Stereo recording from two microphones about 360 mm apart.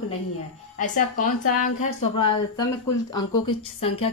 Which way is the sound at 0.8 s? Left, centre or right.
Left.